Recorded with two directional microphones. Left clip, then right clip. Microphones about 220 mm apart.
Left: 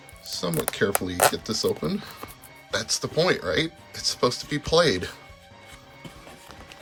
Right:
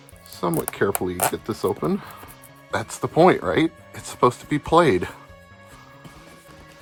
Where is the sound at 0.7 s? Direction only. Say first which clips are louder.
Right 2 dB; 20° right (ahead or behind).